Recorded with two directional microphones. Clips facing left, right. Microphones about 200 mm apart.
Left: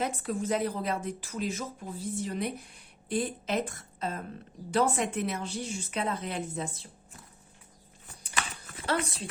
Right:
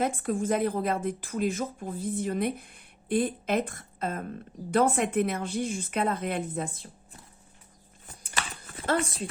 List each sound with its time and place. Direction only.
0.0 s a woman's voice: 50° right (ahead or behind)
8.9 s a woman's voice: 50° right (ahead or behind)